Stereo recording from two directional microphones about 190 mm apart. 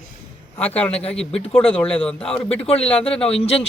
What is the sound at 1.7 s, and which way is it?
Speech, 5° left (ahead or behind).